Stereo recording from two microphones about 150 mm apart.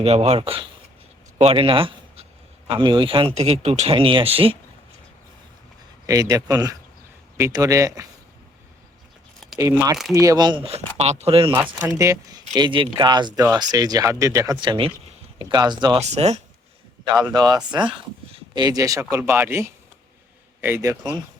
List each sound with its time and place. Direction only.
0.0 s speech: 45° right (ahead or behind)
3.3 s speech: 45° right (ahead or behind)
6.1 s speech: 25° right (ahead or behind)
9.6 s speech: 20° right (ahead or behind); by 11.5 s 40° right (ahead or behind)
11.5 s speech: 10° right (ahead or behind)
12.5 s speech: 30° right (ahead or behind)
16.0 s speech: 45° right (ahead or behind)
17.3 s speech: 25° right (ahead or behind)